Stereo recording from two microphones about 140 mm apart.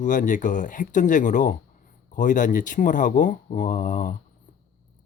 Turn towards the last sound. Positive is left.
turn(degrees=65)  # may be behind; listen again after turning